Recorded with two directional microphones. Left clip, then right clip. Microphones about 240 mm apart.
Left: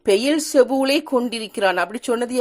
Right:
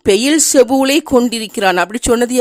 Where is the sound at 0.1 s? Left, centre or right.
Right.